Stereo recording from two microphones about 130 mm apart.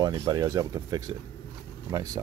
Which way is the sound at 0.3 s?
30° right (ahead or behind).